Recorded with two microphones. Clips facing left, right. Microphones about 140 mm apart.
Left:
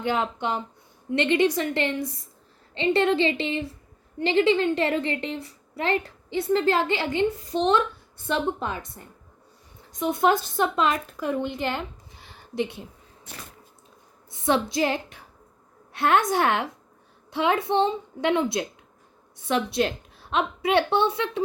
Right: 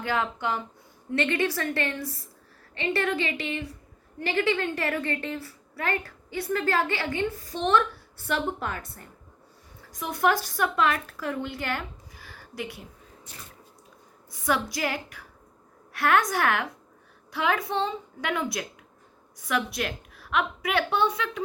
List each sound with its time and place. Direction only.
0.0 s a woman's voice: 20° left (ahead or behind)
13.3 s drip: 65° left (ahead or behind)
14.3 s a woman's voice: 25° left (ahead or behind)